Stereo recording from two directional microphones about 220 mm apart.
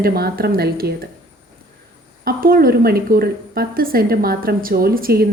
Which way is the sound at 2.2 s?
40° right (ahead or behind).